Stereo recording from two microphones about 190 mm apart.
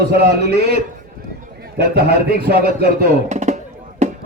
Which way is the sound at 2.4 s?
55° right (ahead or behind).